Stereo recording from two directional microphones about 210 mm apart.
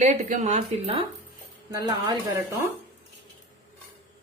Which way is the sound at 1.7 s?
20° right (ahead or behind).